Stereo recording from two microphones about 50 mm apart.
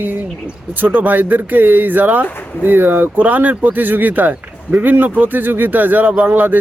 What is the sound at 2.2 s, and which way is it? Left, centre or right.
Speech, left.